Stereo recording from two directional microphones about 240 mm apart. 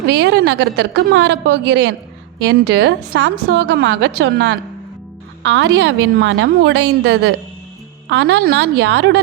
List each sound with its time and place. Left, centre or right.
0.0 s a woman's voice: right